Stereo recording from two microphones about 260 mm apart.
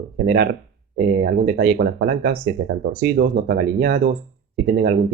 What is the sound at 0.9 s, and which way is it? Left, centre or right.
Speech, right.